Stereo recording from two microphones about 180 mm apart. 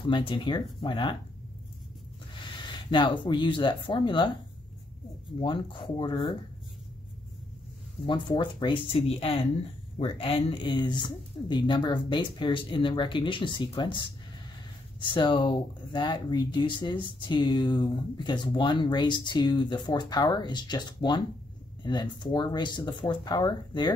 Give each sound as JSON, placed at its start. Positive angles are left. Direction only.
{"t": 0.1, "sound": "speech", "side_deg": 30}
{"t": 2.4, "sound": "speech", "side_deg": 25}
{"t": 5.4, "sound": "speech", "side_deg": 25}
{"t": 8.1, "sound": "speech", "side_deg": 25}
{"t": 15.0, "sound": "speech", "side_deg": 25}